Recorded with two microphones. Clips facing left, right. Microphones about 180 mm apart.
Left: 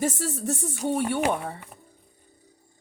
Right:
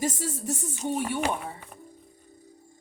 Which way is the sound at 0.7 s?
65° left (ahead or behind).